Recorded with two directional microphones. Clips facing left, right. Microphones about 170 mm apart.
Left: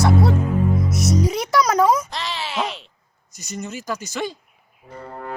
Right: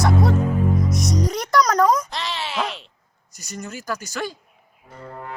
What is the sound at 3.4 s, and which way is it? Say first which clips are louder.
Speech: left 3 dB; 35° right (ahead or behind).